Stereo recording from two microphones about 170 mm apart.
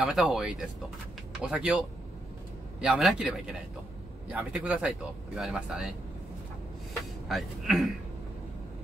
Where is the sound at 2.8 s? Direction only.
5° right (ahead or behind).